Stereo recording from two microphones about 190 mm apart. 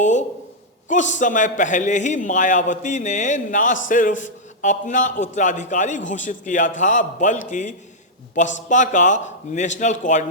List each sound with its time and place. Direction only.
0.0 s a man's voice: 40° left (ahead or behind)